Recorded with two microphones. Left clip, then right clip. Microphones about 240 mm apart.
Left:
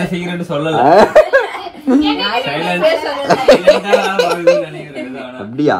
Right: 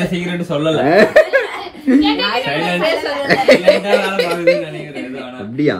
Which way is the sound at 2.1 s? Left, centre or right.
Centre.